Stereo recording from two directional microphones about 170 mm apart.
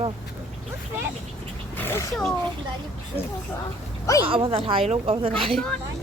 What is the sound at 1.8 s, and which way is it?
Speech, 10° left (ahead or behind).